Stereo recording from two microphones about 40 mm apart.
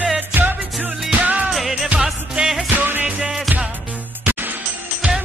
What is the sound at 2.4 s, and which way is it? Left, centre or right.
Music, right.